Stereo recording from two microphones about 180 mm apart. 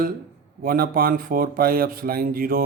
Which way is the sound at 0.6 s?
55° right (ahead or behind).